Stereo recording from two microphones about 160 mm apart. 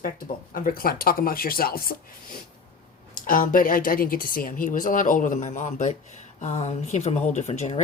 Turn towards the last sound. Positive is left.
turn(degrees=45)  # may be behind; listen again after turning